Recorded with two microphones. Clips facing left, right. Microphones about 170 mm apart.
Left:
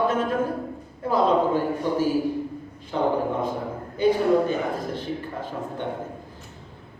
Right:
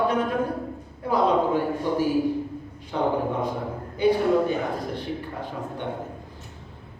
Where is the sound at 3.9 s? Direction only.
15° right (ahead or behind).